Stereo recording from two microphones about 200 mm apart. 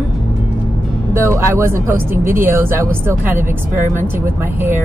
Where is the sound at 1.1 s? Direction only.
15° right (ahead or behind).